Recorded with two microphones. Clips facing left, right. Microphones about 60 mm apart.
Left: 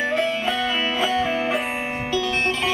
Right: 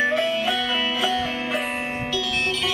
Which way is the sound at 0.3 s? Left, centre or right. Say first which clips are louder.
Even; left.